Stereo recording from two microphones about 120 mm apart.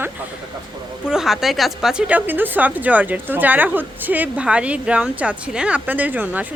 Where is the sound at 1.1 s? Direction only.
5° right (ahead or behind).